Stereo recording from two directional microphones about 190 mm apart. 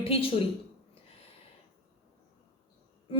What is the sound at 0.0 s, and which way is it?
Speech, 30° left (ahead or behind).